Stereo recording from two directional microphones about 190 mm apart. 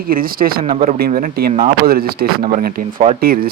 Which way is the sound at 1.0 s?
50° right (ahead or behind).